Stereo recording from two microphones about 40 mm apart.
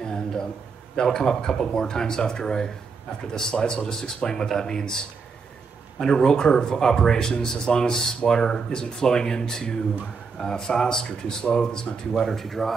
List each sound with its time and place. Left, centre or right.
0.0 s a sound: centre
0.9 s speech: centre
12.1 s speech: centre